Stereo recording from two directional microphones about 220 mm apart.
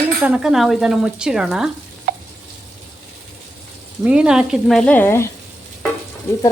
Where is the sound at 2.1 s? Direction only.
40° right (ahead or behind).